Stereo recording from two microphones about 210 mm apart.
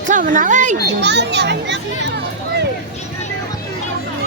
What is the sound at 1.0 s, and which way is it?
Speech, 55° right (ahead or behind).